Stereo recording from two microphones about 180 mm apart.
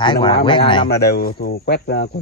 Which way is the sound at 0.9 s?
60° left (ahead or behind).